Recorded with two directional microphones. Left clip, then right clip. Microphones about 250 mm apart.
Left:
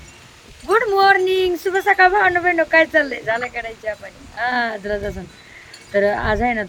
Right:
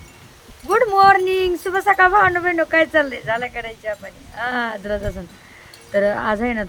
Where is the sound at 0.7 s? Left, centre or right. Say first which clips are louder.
Right 1 dB; centre.